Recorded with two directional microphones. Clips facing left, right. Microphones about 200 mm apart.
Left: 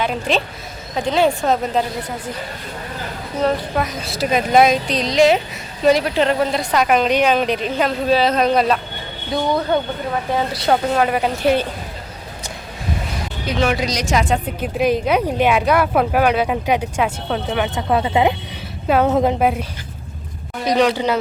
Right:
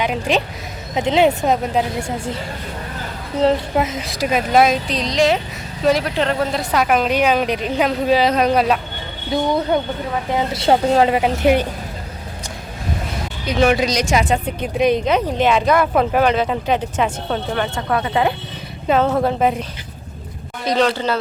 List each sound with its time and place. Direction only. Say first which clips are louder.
0.0 s a woman's voice: right 1 dB; 15° right (ahead or behind)
3.4 s a woman's voice: right 3 dB; 25° right (ahead or behind)
10.3 s a woman's voice: right 2 dB; 25° right (ahead or behind)
13.6 s a woman's voice: right 4 dB; 20° right (ahead or behind)
14.2 s a woman's voice: right 1 dB; centre (ahead or behind); by 19.4 s 15° left (ahead or behind)
19.4 s a woman's voice: even; 5° left (ahead or behind)
20.7 s a woman's voice: left 1 dB; 15° left (ahead or behind)